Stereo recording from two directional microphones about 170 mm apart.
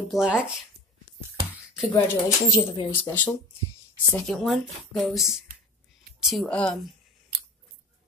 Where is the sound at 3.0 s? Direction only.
10° left (ahead or behind).